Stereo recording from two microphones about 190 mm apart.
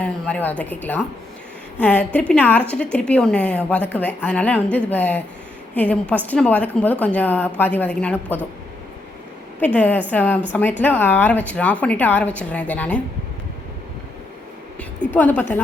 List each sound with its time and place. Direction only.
0.0 s a woman's voice: 10° left (ahead or behind)
9.6 s speech: 10° left (ahead or behind)
14.8 s a woman's voice: 10° left (ahead or behind)